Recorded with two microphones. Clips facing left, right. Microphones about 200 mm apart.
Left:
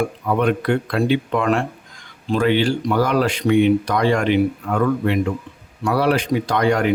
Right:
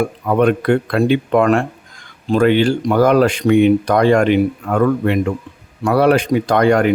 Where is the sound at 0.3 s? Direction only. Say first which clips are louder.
Right 5 dB; 50° right (ahead or behind).